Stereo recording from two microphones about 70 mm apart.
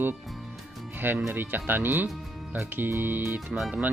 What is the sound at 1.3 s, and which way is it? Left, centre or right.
Speech, right.